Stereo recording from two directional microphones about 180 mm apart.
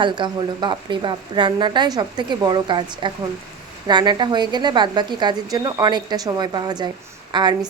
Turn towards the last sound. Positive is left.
turn(degrees=-25)  # may be behind; listen again after turning